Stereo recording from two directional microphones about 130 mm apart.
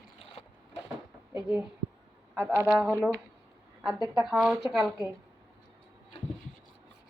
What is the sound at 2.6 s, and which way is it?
A woman's voice, 5° right (ahead or behind).